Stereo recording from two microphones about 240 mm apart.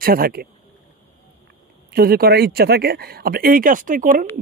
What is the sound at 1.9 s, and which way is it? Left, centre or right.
Speech, right.